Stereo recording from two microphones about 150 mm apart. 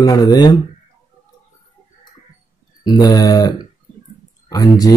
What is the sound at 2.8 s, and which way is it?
Speech, 25° left (ahead or behind).